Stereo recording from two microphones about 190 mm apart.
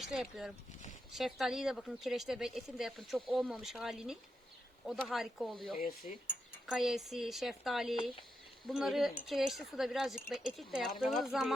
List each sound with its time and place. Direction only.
0.0 s speech: centre (ahead or behind)
6.0 s a sound: 40° left (ahead or behind)
6.7 s speech: centre (ahead or behind)